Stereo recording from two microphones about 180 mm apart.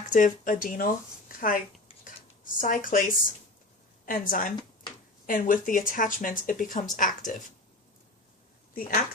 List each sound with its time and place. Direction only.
0.1 s speech: 45° left (ahead or behind)
2.0 s a sound: 45° left (ahead or behind)
4.0 s speech: 50° left (ahead or behind)
8.7 s speech: 50° left (ahead or behind)